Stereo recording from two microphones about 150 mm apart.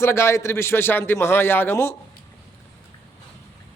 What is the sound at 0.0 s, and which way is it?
Speech, 20° left (ahead or behind).